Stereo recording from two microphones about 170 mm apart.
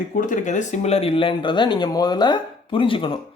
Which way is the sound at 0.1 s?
50° left (ahead or behind).